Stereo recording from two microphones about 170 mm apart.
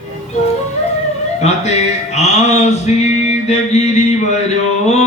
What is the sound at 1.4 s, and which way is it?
Music, 40° left (ahead or behind).